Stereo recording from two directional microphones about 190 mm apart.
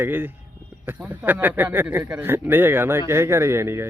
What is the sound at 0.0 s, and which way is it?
Speech, 10° right (ahead or behind).